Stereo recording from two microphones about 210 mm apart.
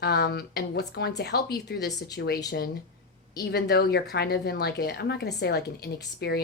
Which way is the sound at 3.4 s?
50° left (ahead or behind).